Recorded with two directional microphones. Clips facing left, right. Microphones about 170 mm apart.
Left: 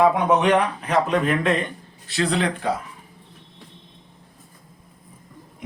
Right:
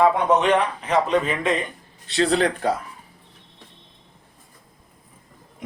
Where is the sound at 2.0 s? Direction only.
25° right (ahead or behind).